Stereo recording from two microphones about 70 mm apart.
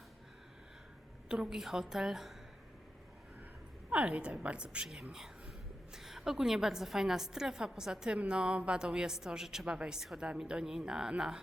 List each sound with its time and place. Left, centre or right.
1.3 s a woman's voice: centre
3.8 s a woman's voice: centre
5.9 s a woman's voice: centre